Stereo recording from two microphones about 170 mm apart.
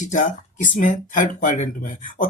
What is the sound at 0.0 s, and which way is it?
Speech, 50° left (ahead or behind).